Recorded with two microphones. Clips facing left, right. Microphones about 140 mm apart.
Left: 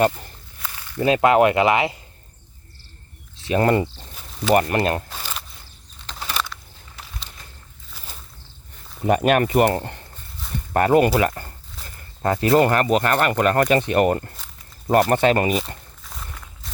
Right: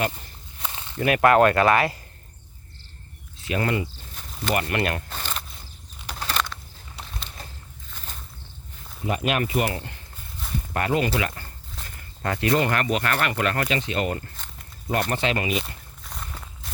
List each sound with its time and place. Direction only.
0.6 s snake: 25° right (ahead or behind)
1.0 s speech: 20° left (ahead or behind)
3.4 s speech: 40° left (ahead or behind)
5.0 s a sound: 5° left (ahead or behind)
6.1 s bird flight: 10° left (ahead or behind)
7.9 s a sound: 5° left (ahead or behind)
9.0 s speech: 50° left (ahead or behind)
11.8 s a sound: centre (ahead or behind)
12.2 s speech: 35° left (ahead or behind)
16.0 s walk: centre (ahead or behind)